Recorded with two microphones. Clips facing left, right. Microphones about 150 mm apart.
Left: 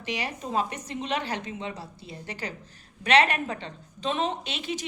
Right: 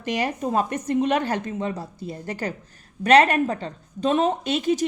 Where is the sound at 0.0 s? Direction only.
45° right (ahead or behind).